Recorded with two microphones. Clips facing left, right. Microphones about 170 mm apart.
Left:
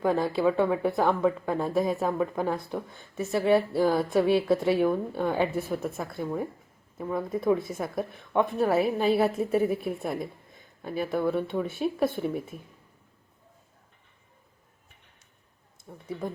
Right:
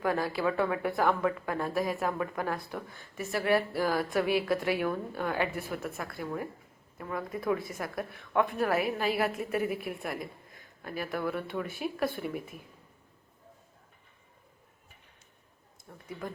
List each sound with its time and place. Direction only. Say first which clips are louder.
0.0 s speech: left 5 dB; 25° left (ahead or behind)
6.1 s a woman's voice: left 5 dB; centre (ahead or behind)
7.1 s speech: left 6 dB; 25° left (ahead or behind)
7.7 s a woman's voice: left 5 dB; centre (ahead or behind)
8.3 s speech: left 3 dB; 25° left (ahead or behind)
10.1 s a sound: left 5 dB; centre (ahead or behind)
11.1 s speech: left 6 dB; 25° left (ahead or behind)
15.9 s speech: left 6 dB; 15° left (ahead or behind)